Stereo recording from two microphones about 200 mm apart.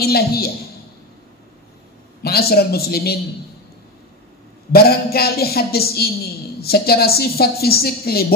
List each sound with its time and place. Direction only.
0.0 s a woman's voice: 50° left (ahead or behind)
2.2 s a woman's voice: 50° left (ahead or behind)
4.7 s a woman's voice: 50° left (ahead or behind)